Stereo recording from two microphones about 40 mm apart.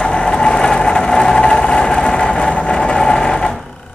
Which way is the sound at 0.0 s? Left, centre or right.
Centre.